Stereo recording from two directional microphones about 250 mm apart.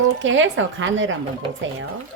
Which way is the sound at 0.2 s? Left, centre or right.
Right.